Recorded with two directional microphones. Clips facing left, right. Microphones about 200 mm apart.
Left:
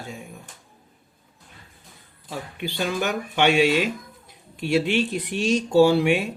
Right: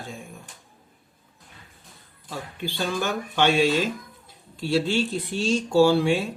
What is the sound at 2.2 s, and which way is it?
Speech, 15° left (ahead or behind).